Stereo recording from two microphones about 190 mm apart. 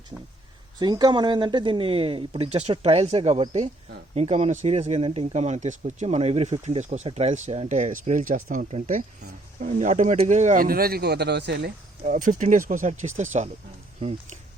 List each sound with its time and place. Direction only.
0.8 s speech: 20° right (ahead or behind); by 11.7 s 60° right (ahead or behind)
12.0 s speech: 40° right (ahead or behind)